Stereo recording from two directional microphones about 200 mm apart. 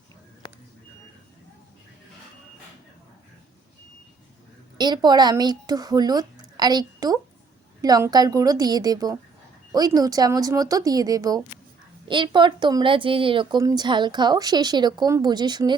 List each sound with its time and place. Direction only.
4.8 s speech: 20° right (ahead or behind)